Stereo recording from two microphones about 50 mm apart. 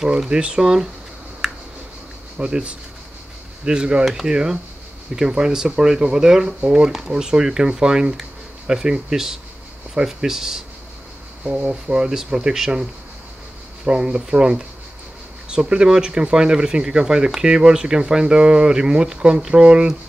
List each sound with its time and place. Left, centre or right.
0.3 s speech: centre
1.4 s a sound: centre
2.3 s speech: right
13.8 s speech: centre